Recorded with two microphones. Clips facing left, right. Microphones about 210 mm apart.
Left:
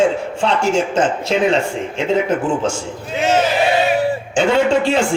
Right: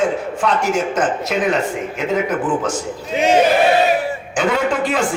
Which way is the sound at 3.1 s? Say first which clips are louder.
Right 2 dB; 15° right (ahead or behind).